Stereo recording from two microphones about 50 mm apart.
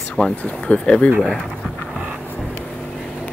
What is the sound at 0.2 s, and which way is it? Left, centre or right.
Speech, left.